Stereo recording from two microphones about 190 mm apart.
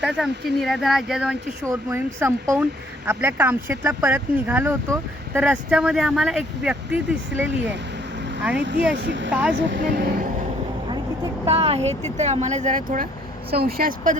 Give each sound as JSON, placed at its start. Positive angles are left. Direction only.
{"t": 0.0, "sound": "speech", "side_deg": 0}
{"t": 1.6, "sound": "speech", "side_deg": -15}
{"t": 8.5, "sound": "speech", "side_deg": -65}
{"t": 9.3, "sound": "speech", "side_deg": -5}
{"t": 9.6, "sound": "speech", "side_deg": -70}
{"t": 10.8, "sound": "vehicle", "side_deg": -30}
{"t": 12.1, "sound": "speech", "side_deg": -35}
{"t": 13.5, "sound": "speech", "side_deg": -55}